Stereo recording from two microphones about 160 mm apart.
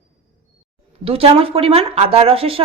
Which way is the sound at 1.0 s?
35° right (ahead or behind).